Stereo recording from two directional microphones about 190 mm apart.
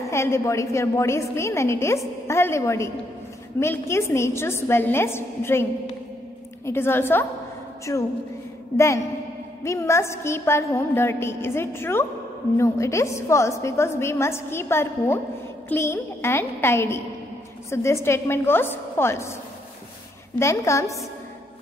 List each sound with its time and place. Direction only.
0.1 s a woman's voice: 15° left (ahead or behind)
20.3 s a woman's voice: 15° left (ahead or behind)